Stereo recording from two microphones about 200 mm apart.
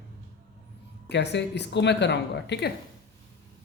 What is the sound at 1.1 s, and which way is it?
Speech, 60° left (ahead or behind).